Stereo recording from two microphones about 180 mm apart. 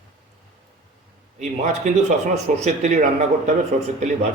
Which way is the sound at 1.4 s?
40° right (ahead or behind).